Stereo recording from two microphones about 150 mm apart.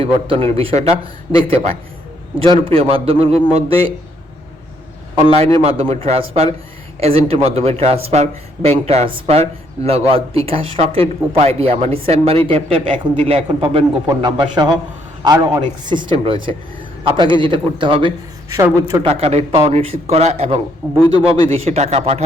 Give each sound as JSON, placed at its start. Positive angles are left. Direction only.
{"t": 0.0, "sound": "speech", "side_deg": -40}
{"t": 2.4, "sound": "speech", "side_deg": -35}
{"t": 5.2, "sound": "a man's voice", "side_deg": -40}
{"t": 14.1, "sound": "a man's voice", "side_deg": -25}
{"t": 18.5, "sound": "a man's voice", "side_deg": -20}
{"t": 19.0, "sound": "a man's voice", "side_deg": -40}
{"t": 20.8, "sound": "a man's voice", "side_deg": -10}
{"t": 21.5, "sound": "a man's voice", "side_deg": -45}